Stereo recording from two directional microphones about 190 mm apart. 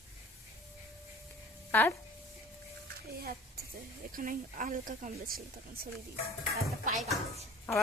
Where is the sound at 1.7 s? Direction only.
10° left (ahead or behind).